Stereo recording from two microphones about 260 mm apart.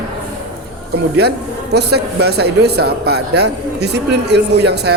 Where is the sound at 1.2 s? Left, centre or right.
Right.